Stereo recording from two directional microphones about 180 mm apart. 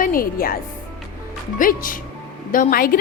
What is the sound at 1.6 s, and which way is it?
Music, 50° left (ahead or behind).